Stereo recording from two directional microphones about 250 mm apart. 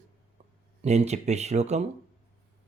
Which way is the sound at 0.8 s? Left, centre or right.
Right.